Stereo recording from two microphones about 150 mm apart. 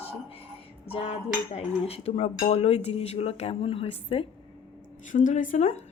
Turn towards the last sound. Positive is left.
turn(degrees=55)  # may be behind; listen again after turning